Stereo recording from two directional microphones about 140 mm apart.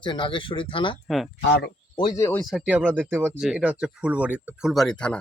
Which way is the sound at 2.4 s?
5° right (ahead or behind).